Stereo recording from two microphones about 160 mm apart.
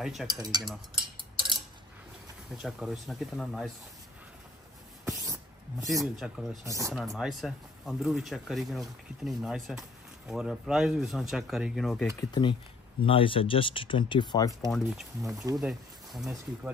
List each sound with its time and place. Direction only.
0.0 s speech: centre (ahead or behind)
0.3 s cutlery: 25° right (ahead or behind)
1.1 s tick-tock: 30° right (ahead or behind)
2.5 s speech: 5° right (ahead or behind)
5.0 s a sound: 20° right (ahead or behind)
6.1 s speech: centre (ahead or behind)
6.6 s cutlery: 20° right (ahead or behind)
6.9 s speech: centre (ahead or behind)
12.2 s speech: 30° left (ahead or behind)
14.7 s speech: centre (ahead or behind)